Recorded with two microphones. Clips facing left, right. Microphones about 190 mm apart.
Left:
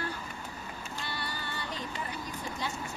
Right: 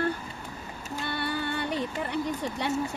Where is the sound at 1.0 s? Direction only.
60° right (ahead or behind).